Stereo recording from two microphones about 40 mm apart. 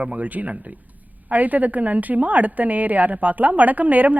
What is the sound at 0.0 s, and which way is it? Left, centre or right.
A woman's voice, right.